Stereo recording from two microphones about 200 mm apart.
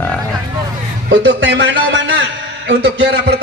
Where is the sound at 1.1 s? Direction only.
60° right (ahead or behind).